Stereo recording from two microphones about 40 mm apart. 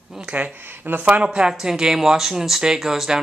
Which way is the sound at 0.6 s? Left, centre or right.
Right.